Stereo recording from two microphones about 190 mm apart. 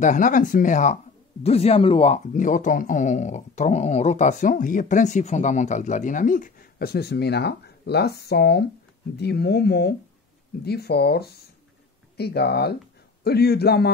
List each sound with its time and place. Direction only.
0.0 s speech: 40° left (ahead or behind); by 13.9 s 55° left (ahead or behind)